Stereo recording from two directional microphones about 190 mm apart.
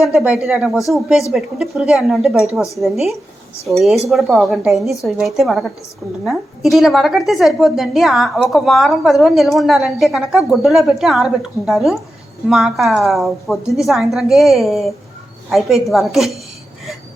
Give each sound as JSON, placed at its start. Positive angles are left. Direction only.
{"t": 0.0, "sound": "a woman's voice", "side_deg": -5}